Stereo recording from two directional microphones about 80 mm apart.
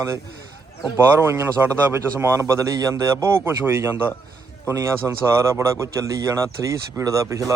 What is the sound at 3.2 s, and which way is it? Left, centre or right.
Speech, right.